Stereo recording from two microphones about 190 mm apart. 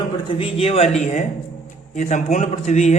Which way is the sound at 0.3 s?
30° left (ahead or behind).